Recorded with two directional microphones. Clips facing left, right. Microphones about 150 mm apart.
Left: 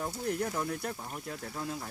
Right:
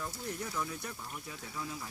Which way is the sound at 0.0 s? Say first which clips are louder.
Left 7 dB; 60° left (ahead or behind).